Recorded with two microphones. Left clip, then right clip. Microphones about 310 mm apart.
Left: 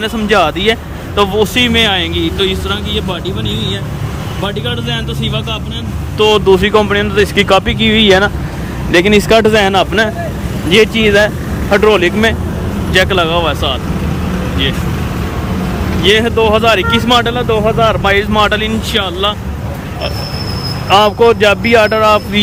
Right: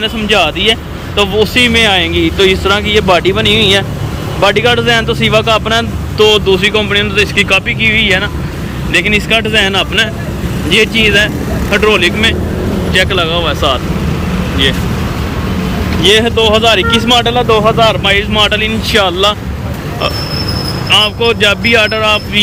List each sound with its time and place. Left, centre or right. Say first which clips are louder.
0.0 s speech: right 1 dB; centre
6.2 s speech: even; centre
7.8 s speech: left 1 dB; left
8.9 s speech: left 2 dB; centre
16.0 s speech: right 2 dB; centre
20.9 s speech: left 2 dB; centre